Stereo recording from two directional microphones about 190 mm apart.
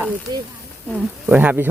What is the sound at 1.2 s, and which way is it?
Speech, 10° right (ahead or behind).